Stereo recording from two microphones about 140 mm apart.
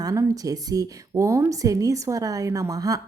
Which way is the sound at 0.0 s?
25° right (ahead or behind).